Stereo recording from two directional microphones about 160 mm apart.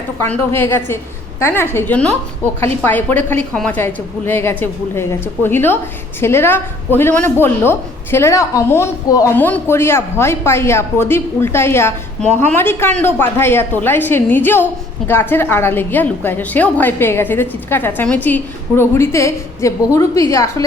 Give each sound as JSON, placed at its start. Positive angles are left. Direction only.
{"t": 0.2, "sound": "a woman's voice", "side_deg": 15}